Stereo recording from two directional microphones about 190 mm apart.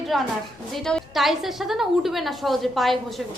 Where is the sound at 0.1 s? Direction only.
Centre (ahead or behind).